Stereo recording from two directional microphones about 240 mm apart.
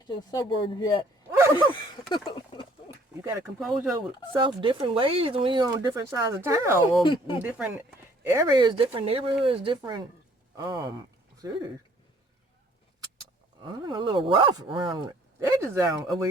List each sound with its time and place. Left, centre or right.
0.1 s speech: centre
1.4 s a sound: centre
1.7 s speech: centre
3.2 s speech: centre
4.4 s speech: centre
7.0 s speech: left
7.4 s speech: centre
13.7 s speech: centre